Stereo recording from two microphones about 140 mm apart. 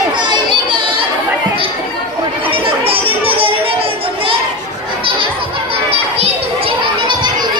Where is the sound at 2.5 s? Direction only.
40° right (ahead or behind).